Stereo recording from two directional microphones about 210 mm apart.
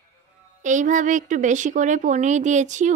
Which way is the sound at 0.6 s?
35° right (ahead or behind).